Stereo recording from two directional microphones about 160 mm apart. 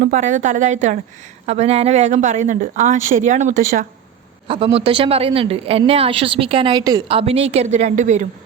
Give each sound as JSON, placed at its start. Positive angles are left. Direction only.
{"t": 0.0, "sound": "a woman's voice", "side_deg": -50}
{"t": 4.4, "sound": "a woman's voice", "side_deg": -35}
{"t": 7.2, "sound": "a woman's voice", "side_deg": -40}